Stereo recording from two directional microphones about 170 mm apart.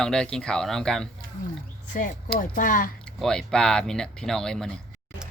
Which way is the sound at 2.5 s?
55° left (ahead or behind).